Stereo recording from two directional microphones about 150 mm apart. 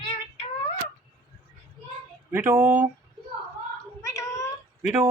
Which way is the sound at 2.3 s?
15° right (ahead or behind).